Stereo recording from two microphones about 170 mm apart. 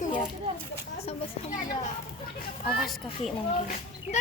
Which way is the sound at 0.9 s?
40° left (ahead or behind).